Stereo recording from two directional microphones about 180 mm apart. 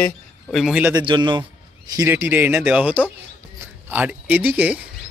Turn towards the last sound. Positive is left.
turn(degrees=-10)  # may be behind; listen again after turning